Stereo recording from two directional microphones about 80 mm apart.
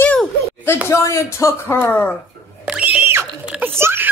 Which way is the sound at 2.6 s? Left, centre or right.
Centre.